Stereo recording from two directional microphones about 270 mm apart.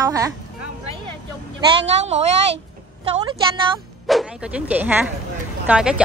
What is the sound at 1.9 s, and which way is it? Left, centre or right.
Speech, right.